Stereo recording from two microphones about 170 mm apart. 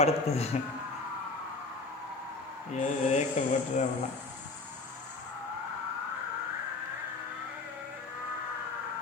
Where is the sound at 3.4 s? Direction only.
45° left (ahead or behind).